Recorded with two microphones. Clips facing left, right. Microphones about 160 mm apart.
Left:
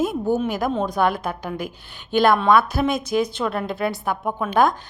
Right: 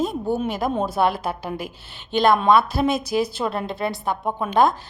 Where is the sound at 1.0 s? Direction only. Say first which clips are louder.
Right 1 dB; 30° right (ahead or behind).